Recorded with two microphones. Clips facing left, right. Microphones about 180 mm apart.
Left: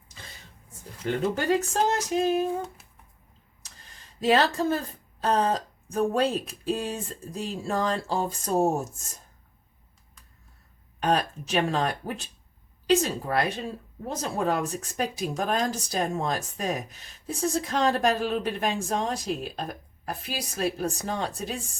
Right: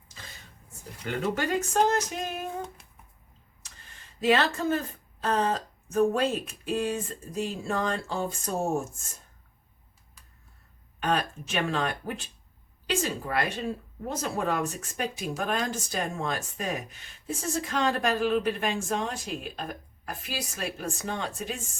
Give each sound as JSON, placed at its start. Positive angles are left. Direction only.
{"t": 1.4, "sound": "speech", "side_deg": 35}
{"t": 3.6, "sound": "a sound", "side_deg": 35}
{"t": 5.2, "sound": "speech", "side_deg": 35}
{"t": 11.0, "sound": "speech", "side_deg": 35}